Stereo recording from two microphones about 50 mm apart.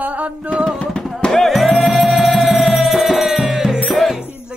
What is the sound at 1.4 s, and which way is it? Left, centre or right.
Music, centre.